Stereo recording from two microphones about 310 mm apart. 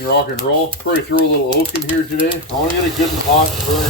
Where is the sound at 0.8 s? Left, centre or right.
Left.